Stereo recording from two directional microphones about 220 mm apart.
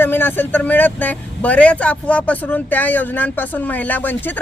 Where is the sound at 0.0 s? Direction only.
10° left (ahead or behind).